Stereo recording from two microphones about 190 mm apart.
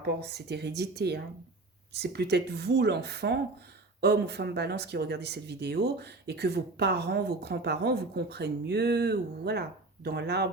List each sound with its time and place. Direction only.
0.0 s speech: 60° right (ahead or behind)